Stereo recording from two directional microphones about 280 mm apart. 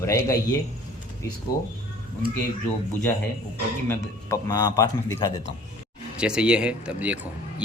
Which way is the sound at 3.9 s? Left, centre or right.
Centre.